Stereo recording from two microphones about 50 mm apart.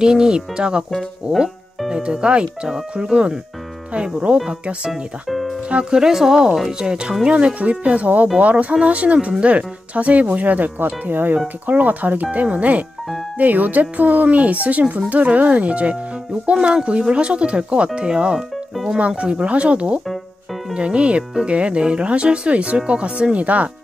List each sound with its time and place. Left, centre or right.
0.0 s speech: centre
1.9 s speech: centre
4.5 s speech: centre
11.1 s speech: right